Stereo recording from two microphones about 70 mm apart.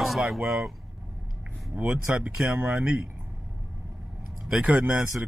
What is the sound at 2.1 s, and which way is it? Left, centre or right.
Speech, centre.